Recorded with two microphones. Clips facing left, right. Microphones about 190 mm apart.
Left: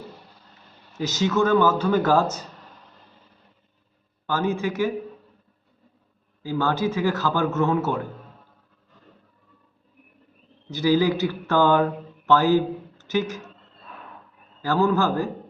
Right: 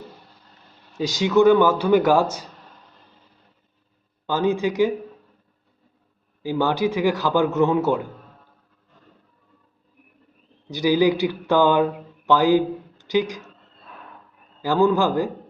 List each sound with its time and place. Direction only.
0.9 s a man's voice: 15° right (ahead or behind)
4.3 s a man's voice: 15° right (ahead or behind)
6.4 s a man's voice: 15° right (ahead or behind)
10.7 s speech: 15° right (ahead or behind)
14.6 s a man's voice: 15° right (ahead or behind)